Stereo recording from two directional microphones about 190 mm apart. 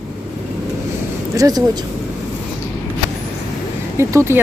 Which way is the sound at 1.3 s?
20° right (ahead or behind).